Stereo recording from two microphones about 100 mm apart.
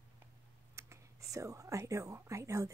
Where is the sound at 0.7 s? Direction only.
30° right (ahead or behind).